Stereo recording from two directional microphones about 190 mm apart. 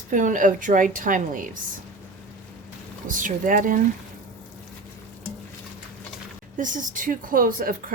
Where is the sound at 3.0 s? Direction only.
45° right (ahead or behind).